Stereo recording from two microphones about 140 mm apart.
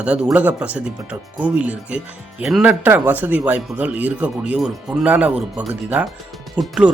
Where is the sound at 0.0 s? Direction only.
5° right (ahead or behind).